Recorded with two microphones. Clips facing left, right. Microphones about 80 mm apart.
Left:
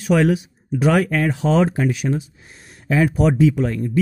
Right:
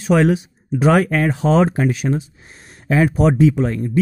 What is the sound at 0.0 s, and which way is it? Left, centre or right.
A man's voice, right.